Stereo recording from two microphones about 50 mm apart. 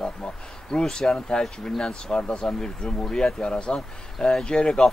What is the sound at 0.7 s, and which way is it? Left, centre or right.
Speech, centre.